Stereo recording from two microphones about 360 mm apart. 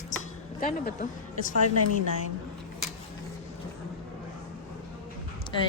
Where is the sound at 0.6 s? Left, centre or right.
Left.